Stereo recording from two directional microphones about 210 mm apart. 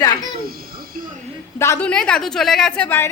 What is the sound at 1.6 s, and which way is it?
A woman's voice, 10° left (ahead or behind).